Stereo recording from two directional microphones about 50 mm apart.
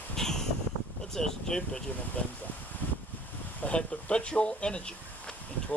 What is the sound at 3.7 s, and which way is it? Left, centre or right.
Speech, left.